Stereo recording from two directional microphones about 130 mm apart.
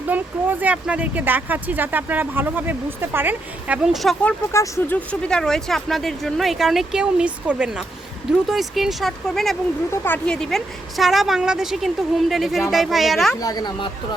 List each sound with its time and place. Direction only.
0.1 s speech: 15° right (ahead or behind)
3.9 s speech: centre (ahead or behind)
4.5 s speech: 20° left (ahead or behind)
4.9 s speech: 5° left (ahead or behind)
9.9 s speech: 15° left (ahead or behind)
10.2 s speech: 5° left (ahead or behind)
13.4 s speech: 30° left (ahead or behind)